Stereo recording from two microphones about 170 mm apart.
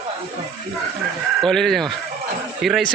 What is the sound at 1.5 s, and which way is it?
Speech, centre (ahead or behind).